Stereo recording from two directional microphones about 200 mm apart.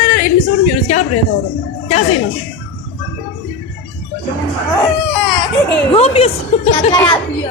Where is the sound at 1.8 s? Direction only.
30° left (ahead or behind).